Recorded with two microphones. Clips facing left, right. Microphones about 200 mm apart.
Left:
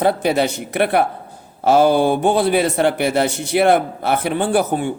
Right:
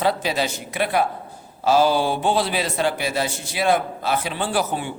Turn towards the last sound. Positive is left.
turn(degrees=55)  # may be behind; listen again after turning